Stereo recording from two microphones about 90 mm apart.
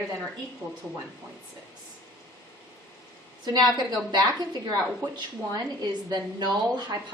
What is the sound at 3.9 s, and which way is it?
Speech, 50° right (ahead or behind).